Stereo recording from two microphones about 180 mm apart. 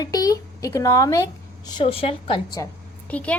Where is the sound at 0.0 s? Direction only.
20° left (ahead or behind).